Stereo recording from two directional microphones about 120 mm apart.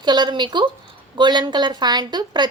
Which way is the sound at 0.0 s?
40° right (ahead or behind).